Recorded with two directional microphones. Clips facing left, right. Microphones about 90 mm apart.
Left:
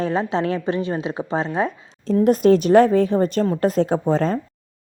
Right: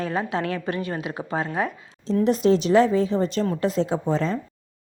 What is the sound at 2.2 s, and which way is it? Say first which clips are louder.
A woman's voice: left 5 dB; 50° left (ahead or behind).